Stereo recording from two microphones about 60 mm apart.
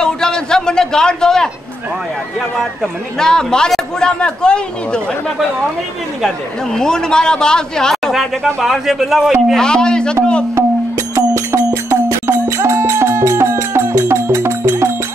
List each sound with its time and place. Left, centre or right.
0.0 s a sound: centre
2.5 s speech: centre
3.2 s a man's voice: centre
6.2 s a man's voice: centre
8.1 s speech: centre
9.6 s a man's voice: centre
10.5 s music: right